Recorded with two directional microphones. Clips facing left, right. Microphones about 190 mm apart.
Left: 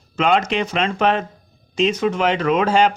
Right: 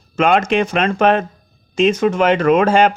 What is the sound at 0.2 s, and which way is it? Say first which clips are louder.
Speech: right 4 dB; 50° right (ahead or behind).